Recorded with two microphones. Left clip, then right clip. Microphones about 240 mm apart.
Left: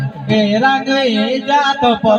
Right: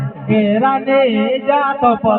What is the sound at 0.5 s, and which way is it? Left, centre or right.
Music, left.